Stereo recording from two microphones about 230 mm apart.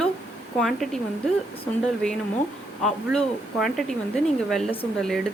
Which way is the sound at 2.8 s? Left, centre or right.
Centre.